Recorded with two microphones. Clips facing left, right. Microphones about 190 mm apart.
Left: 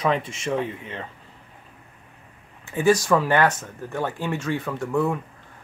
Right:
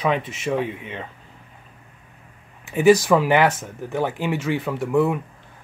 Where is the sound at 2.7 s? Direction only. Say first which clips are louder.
Right 4 dB; 10° right (ahead or behind).